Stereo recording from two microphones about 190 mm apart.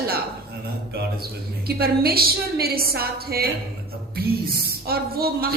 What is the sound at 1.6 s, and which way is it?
A woman's voice, 55° right (ahead or behind).